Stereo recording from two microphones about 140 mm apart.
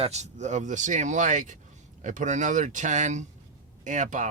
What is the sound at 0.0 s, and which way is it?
Speech, 50° right (ahead or behind).